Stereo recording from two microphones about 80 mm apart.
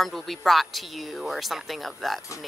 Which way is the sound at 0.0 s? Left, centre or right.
Centre.